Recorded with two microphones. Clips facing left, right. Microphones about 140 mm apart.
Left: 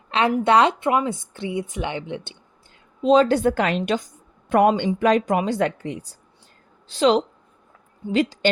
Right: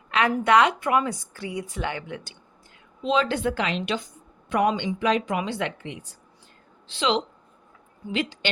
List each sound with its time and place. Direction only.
0.1 s a woman's voice: 30° left (ahead or behind)
3.0 s a woman's voice: 40° left (ahead or behind)